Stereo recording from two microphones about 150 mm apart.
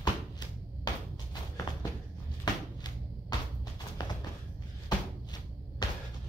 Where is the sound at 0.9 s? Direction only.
25° left (ahead or behind).